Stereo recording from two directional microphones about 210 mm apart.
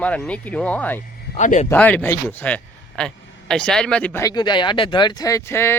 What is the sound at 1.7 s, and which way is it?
A man's voice, 5° left (ahead or behind).